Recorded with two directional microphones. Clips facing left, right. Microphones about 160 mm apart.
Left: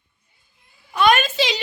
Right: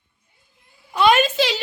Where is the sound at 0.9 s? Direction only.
25° right (ahead or behind).